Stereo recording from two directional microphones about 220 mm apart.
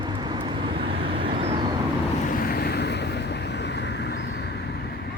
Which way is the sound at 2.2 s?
40° left (ahead or behind).